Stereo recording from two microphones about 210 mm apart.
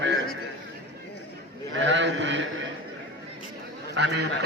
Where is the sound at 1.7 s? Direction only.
60° right (ahead or behind).